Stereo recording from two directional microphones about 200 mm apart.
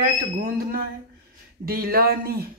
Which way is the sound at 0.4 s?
45° right (ahead or behind).